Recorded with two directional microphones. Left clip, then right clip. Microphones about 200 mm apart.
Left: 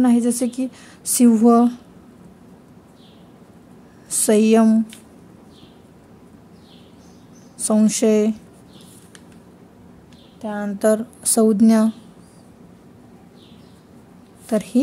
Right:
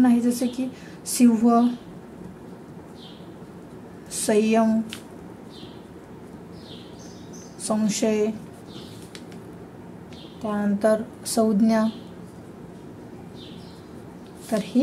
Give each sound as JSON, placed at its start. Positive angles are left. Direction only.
{"t": 0.0, "sound": "a woman's voice", "side_deg": 55}
{"t": 4.1, "sound": "a woman's voice", "side_deg": 60}
{"t": 7.6, "sound": "a woman's voice", "side_deg": 60}
{"t": 10.4, "sound": "a woman's voice", "side_deg": 60}
{"t": 14.5, "sound": "a woman's voice", "side_deg": 60}